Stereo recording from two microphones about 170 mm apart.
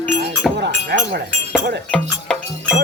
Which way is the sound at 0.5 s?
75° right (ahead or behind).